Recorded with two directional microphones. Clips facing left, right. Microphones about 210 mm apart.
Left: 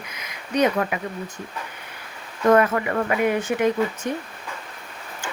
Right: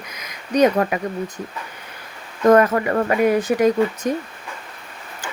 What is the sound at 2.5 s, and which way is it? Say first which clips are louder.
Speech: right 3 dB; 40° right (ahead or behind).